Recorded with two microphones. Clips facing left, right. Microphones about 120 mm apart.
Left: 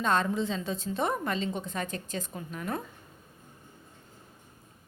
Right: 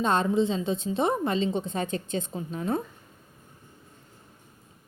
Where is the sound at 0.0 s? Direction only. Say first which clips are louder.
Right 4 dB; 25° right (ahead or behind).